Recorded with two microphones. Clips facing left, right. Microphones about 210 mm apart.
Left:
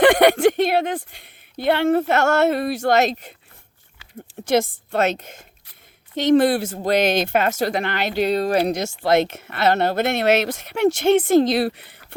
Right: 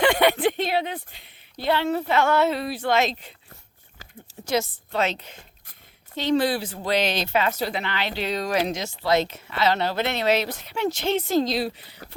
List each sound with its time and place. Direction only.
0.0 s speech: 80° left
0.3 s a woman's voice: 45° left (ahead or behind)
0.5 s a woman's voice: 60° left (ahead or behind); by 3.3 s 45° left (ahead or behind)
4.5 s a woman's voice: 50° left (ahead or behind)
8.8 s a woman's voice: 50° left (ahead or behind)
10.2 s speech: 75° left (ahead or behind); by 11.4 s 55° left (ahead or behind)
11.5 s speech: 65° left (ahead or behind)